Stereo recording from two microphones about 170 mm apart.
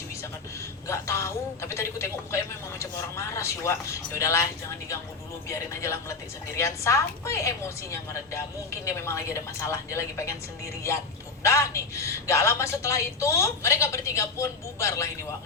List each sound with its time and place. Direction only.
0.9 s a woman's voice: 15° left (ahead or behind)
5.5 s a woman's voice: 15° left (ahead or behind)